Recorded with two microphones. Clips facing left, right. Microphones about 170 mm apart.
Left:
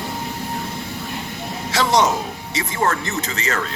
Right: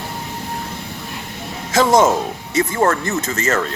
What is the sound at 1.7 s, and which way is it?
Speech, 50° right (ahead or behind).